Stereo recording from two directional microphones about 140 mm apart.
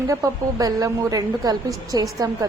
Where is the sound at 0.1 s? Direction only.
25° right (ahead or behind).